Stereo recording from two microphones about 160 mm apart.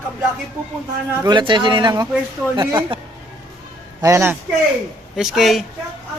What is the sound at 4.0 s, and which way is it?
Speech, 20° right (ahead or behind).